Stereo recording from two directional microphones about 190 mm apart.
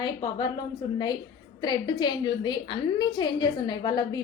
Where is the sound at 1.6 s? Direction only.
20° left (ahead or behind).